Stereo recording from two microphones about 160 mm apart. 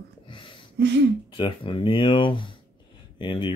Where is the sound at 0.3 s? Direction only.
30° left (ahead or behind).